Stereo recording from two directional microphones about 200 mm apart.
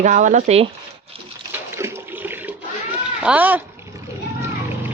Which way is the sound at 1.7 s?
10° right (ahead or behind).